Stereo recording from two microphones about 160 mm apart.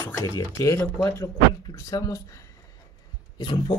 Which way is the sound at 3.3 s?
30° left (ahead or behind).